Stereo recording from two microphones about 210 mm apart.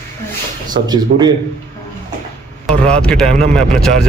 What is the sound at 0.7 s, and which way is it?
Speech, 20° right (ahead or behind).